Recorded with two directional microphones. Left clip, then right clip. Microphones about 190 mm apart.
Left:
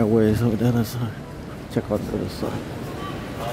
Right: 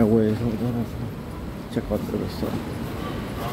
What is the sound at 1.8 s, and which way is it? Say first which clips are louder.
Speech: left 2 dB; 25° left (ahead or behind).